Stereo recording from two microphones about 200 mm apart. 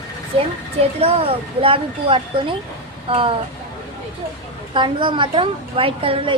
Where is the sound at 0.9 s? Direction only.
30° right (ahead or behind).